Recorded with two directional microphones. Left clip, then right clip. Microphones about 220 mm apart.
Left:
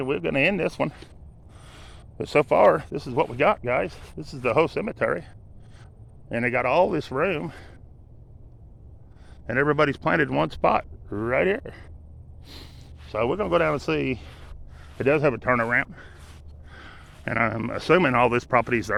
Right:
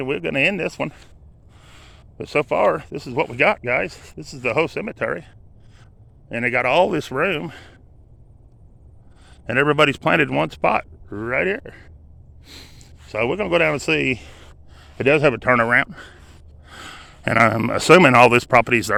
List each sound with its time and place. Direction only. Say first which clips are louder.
0.0 s speech: right 3 dB; 20° right (ahead or behind)
1.5 s a sound: even; 5° right (ahead or behind)
2.9 s speech: right 2 dB; 20° right (ahead or behind)
6.4 s a man's voice: right 4 dB; 30° right (ahead or behind)
9.2 s speech: right 5 dB; 35° right (ahead or behind); by 11.9 s 10° right (ahead or behind)
12.5 s speech: right 3 dB; 20° right (ahead or behind)
14.8 s a man's voice: right 5 dB; 45° right (ahead or behind)
16.6 s a sound: right 8 dB; 55° right (ahead or behind)
17.2 s speech: right 8 dB; 55° right (ahead or behind); by 18.9 s 40° right (ahead or behind)